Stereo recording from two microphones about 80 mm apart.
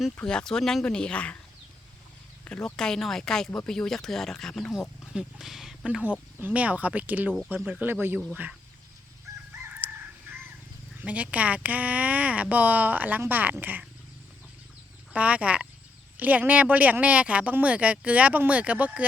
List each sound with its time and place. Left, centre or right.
0.2 s speech: centre
2.4 s speech: centre
6.0 s speech: centre
9.8 s crowing: centre
11.0 s speech: centre
15.1 s speech: centre